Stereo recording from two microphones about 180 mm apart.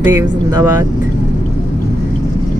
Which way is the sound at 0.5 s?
15° right (ahead or behind).